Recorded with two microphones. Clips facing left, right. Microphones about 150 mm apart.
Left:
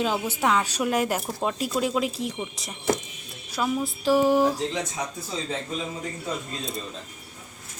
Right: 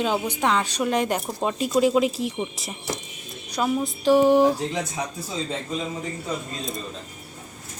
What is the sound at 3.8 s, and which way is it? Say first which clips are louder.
Speech: right 4 dB; centre (ahead or behind).